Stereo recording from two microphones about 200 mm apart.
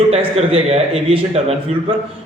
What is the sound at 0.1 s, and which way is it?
A man's voice, 30° right (ahead or behind).